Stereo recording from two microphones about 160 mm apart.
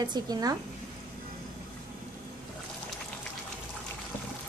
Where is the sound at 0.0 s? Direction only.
25° right (ahead or behind).